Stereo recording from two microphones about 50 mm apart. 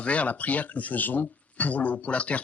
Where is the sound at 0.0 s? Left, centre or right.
Left.